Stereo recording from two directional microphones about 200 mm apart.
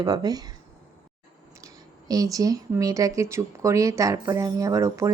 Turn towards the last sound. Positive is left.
turn(degrees=-15)  # may be behind; listen again after turning